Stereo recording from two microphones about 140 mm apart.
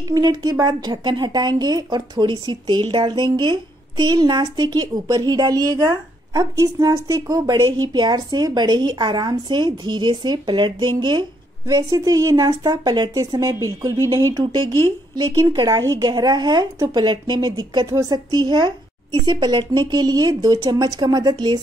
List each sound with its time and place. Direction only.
0.1 s speech: 30° right (ahead or behind)